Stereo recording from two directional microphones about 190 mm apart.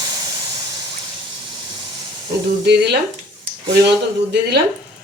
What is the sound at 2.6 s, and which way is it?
A woman's voice, 65° right (ahead or behind).